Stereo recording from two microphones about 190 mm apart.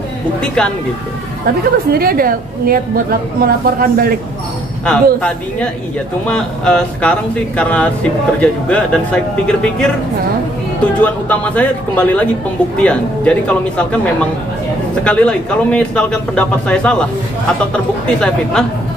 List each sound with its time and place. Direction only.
0.6 s speech: 5° left (ahead or behind)
1.9 s a woman's voice: 50° right (ahead or behind)
4.8 s speech: 5° left (ahead or behind)
15.0 s speech: 5° left (ahead or behind)
18.0 s speech: 5° left (ahead or behind)